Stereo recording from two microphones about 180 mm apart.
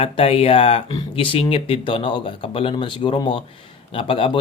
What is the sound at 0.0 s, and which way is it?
Speech, 35° left (ahead or behind).